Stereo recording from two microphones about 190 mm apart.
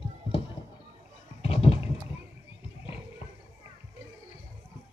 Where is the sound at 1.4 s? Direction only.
30° left (ahead or behind).